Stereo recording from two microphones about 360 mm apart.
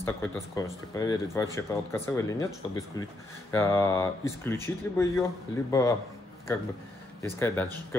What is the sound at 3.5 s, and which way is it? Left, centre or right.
Speech, centre.